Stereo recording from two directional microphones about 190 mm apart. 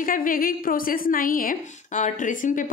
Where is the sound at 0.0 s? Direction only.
45° left (ahead or behind).